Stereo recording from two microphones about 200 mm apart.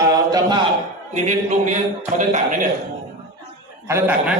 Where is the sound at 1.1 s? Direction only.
35° right (ahead or behind).